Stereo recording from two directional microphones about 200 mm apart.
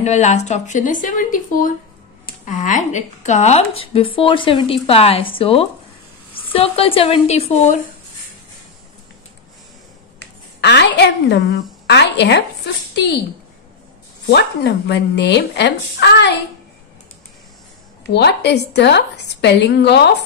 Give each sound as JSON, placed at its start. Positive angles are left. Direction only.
{"t": 0.0, "sound": "speech", "side_deg": 35}
{"t": 10.6, "sound": "a woman's voice", "side_deg": 60}
{"t": 14.3, "sound": "a woman's voice", "side_deg": 55}
{"t": 18.1, "sound": "a woman's voice", "side_deg": 60}